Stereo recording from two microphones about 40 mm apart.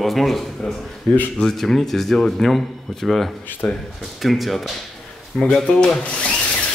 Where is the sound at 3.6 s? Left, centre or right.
Left.